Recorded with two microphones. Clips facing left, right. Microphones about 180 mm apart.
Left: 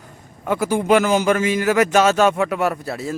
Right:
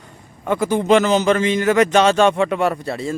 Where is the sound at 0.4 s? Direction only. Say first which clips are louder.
Right 1 dB; 10° left (ahead or behind).